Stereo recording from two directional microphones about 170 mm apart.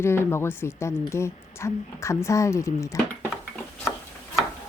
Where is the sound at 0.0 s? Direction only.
15° left (ahead or behind).